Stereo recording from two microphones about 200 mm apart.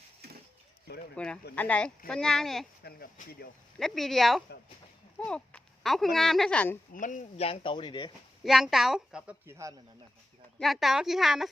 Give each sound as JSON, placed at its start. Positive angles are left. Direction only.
{"t": 1.1, "sound": "a woman's voice", "side_deg": 5}
{"t": 2.8, "sound": "speech", "side_deg": 50}
{"t": 3.8, "sound": "a woman's voice", "side_deg": 0}
{"t": 6.9, "sound": "speech", "side_deg": 40}
{"t": 8.4, "sound": "a woman's voice", "side_deg": 0}
{"t": 10.6, "sound": "a woman's voice", "side_deg": 0}